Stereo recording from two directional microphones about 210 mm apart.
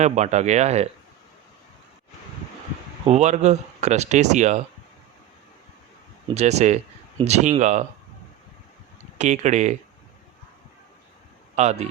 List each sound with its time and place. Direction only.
0.0 s speech: 35° right (ahead or behind)
3.1 s speech: 35° right (ahead or behind)
6.3 s speech: 30° right (ahead or behind)
9.1 s speech: 35° right (ahead or behind)
11.5 s speech: 30° right (ahead or behind)